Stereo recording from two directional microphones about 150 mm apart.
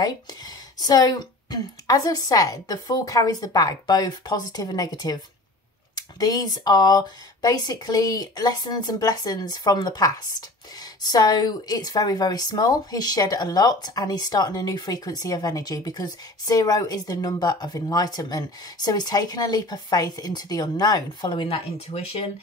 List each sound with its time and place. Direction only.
0.0 s speech: 25° left (ahead or behind)